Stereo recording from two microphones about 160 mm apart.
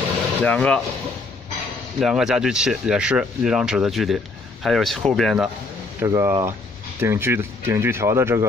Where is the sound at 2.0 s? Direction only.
5° right (ahead or behind).